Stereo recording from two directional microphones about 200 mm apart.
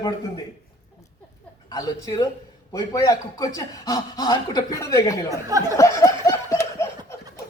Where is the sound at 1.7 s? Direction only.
20° left (ahead or behind).